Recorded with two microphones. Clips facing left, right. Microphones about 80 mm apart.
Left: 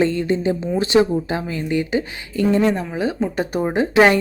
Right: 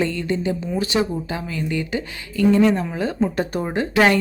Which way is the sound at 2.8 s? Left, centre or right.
Centre.